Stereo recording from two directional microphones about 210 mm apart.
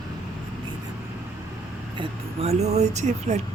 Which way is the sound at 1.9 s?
30° right (ahead or behind).